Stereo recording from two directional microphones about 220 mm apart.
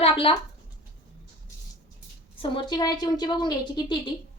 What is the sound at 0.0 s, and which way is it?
Speech, 25° left (ahead or behind).